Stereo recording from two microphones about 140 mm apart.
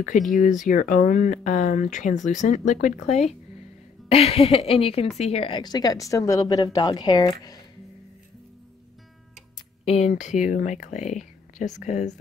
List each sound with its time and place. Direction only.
0.4 s speech: 70° left (ahead or behind)
4.1 s a woman's voice: 45° left (ahead or behind); by 7.6 s 30° left (ahead or behind)
9.8 s speech: 50° left (ahead or behind)